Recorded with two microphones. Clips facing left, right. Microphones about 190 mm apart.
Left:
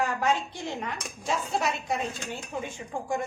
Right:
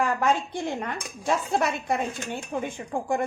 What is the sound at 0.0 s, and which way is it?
Speech, 50° right (ahead or behind).